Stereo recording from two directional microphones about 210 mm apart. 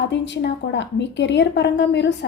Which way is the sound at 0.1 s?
55° left (ahead or behind).